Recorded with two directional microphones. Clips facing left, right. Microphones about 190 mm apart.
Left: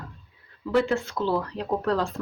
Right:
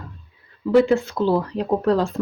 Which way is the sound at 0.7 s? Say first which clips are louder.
Right 7 dB; 10° right (ahead or behind).